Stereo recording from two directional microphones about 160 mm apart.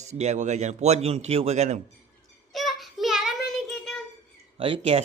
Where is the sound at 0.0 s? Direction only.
45° right (ahead or behind).